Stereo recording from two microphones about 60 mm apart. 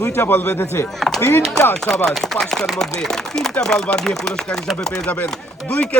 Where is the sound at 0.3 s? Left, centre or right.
Left.